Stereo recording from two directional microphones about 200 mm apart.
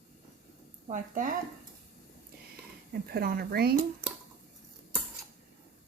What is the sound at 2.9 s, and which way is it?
Speech, 50° right (ahead or behind).